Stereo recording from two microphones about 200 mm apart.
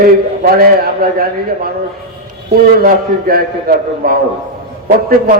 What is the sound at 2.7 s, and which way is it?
A man's voice, 50° right (ahead or behind).